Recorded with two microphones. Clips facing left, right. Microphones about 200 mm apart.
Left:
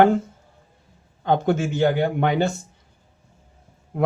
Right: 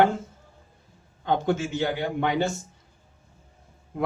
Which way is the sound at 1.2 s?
55° left (ahead or behind).